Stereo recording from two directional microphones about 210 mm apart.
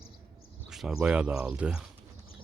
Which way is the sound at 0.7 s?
Centre (ahead or behind).